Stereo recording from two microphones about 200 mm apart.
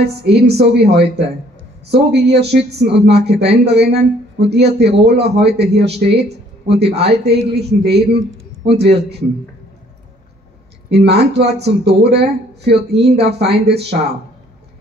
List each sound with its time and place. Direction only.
0.0 s speech: 55° right (ahead or behind)
6.7 s speech: 55° right (ahead or behind)
10.9 s speech: 55° right (ahead or behind)